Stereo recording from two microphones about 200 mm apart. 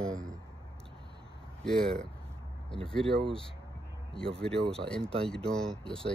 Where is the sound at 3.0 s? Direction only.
25° right (ahead or behind).